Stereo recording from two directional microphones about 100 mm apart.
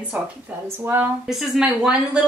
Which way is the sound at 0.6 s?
25° right (ahead or behind).